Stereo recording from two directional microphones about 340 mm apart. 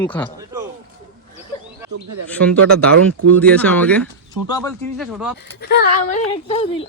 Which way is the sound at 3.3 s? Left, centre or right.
Centre.